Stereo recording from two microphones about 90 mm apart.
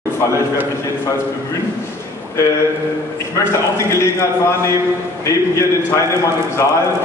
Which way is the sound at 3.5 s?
35° left (ahead or behind).